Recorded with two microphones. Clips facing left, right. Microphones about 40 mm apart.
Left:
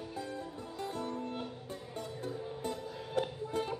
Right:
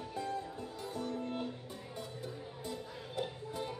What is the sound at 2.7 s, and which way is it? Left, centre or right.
Music, left.